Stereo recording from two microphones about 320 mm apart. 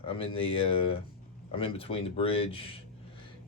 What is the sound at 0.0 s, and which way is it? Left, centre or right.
Speech, centre.